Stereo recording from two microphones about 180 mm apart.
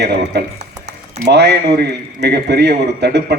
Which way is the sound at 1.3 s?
65° right (ahead or behind).